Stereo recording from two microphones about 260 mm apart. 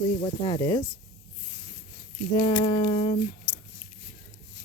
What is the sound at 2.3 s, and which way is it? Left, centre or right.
Speech, centre.